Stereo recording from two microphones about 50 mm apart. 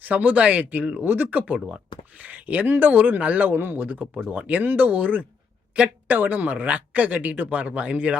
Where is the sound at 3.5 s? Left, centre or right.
Right.